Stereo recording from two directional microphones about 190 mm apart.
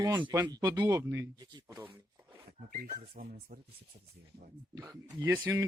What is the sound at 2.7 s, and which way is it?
Speech, 50° right (ahead or behind).